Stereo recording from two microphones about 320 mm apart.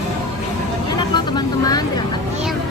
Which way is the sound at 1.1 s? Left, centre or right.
Centre.